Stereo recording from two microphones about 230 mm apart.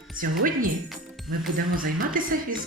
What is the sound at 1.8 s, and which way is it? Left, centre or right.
Speech, right.